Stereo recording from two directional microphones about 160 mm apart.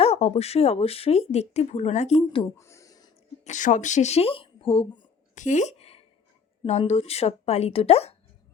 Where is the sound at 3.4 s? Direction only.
50° left (ahead or behind); by 5.0 s 35° left (ahead or behind).